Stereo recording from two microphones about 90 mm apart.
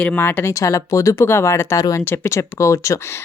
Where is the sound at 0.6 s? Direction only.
35° left (ahead or behind).